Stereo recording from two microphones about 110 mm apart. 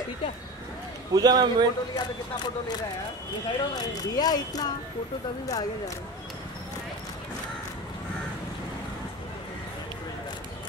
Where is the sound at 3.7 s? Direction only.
35° left (ahead or behind).